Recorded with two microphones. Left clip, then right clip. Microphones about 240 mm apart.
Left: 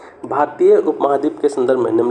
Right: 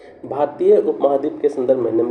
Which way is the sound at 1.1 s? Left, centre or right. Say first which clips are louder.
Left 2 dB; left.